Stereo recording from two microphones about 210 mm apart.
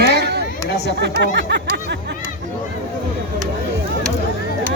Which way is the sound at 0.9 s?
55° right (ahead or behind).